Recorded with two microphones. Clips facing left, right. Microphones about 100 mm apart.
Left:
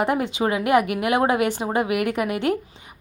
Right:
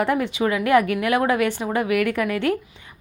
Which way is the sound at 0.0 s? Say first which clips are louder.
Right 1 dB; 20° left (ahead or behind).